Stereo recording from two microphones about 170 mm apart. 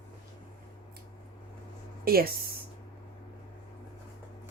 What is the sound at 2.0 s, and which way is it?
Speech, 65° right (ahead or behind).